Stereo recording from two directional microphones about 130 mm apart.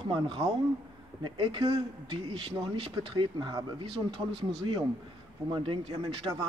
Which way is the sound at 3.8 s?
45° right (ahead or behind).